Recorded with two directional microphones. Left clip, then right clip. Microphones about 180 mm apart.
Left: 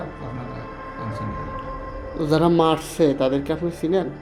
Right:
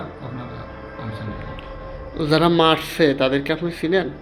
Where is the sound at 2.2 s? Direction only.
10° left (ahead or behind).